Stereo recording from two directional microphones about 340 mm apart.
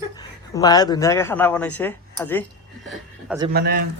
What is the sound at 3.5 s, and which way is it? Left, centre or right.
Speech, right.